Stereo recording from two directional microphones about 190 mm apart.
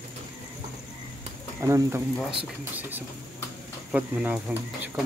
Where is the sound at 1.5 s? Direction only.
15° right (ahead or behind).